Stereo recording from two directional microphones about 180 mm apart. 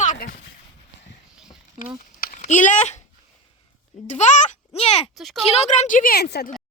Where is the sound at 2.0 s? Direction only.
45° left (ahead or behind).